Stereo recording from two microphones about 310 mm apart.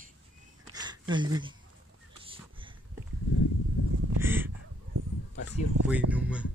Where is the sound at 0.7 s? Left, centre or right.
Centre.